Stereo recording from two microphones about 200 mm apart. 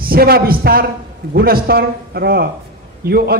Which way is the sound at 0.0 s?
50° right (ahead or behind).